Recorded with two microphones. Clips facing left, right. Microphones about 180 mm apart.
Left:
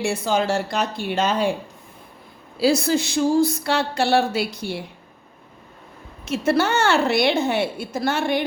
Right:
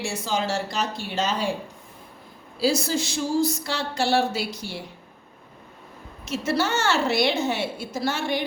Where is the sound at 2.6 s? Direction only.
60° left (ahead or behind).